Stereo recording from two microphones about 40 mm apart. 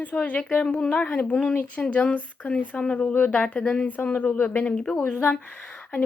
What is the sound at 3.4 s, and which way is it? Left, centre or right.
Speech, left.